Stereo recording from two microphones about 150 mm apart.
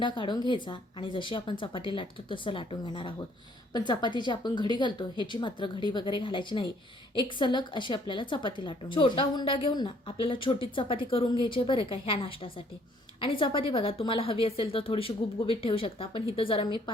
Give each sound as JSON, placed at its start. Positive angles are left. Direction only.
{"t": 0.0, "sound": "a woman's voice", "side_deg": 30}